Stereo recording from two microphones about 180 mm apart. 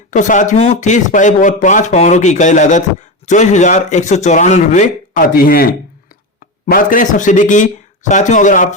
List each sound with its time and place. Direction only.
0.1 s speech: 45° left (ahead or behind)